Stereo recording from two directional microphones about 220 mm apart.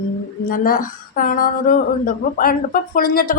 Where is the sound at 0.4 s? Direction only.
40° left (ahead or behind).